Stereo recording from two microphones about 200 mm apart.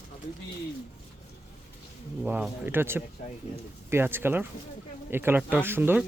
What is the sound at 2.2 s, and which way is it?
Speech, 5° right (ahead or behind).